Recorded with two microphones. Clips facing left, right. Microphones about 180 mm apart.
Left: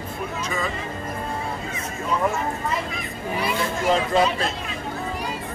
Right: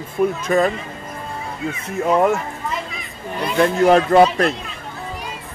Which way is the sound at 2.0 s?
70° right (ahead or behind).